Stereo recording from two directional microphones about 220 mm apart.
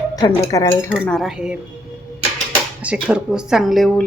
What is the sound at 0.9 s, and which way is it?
Speech, centre (ahead or behind).